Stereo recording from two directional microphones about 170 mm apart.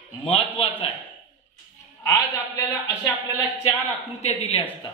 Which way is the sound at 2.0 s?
20° left (ahead or behind).